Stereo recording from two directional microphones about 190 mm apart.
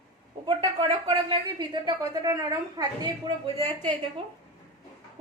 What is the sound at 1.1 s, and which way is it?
A woman's voice, 25° right (ahead or behind).